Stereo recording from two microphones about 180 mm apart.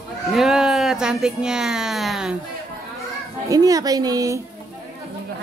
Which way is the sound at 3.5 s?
20° right (ahead or behind).